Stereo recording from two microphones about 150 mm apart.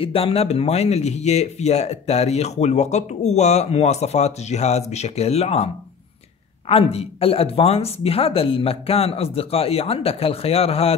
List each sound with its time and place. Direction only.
0.0 s speech: 40° left (ahead or behind)
6.7 s speech: 40° left (ahead or behind)